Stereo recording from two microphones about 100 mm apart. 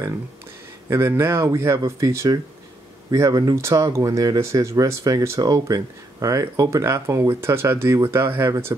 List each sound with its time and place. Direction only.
0.8 s speech: 25° right (ahead or behind)